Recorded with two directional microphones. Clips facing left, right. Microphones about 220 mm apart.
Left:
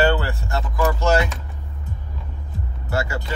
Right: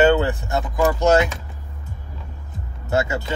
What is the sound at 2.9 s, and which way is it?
Speech, 20° right (ahead or behind).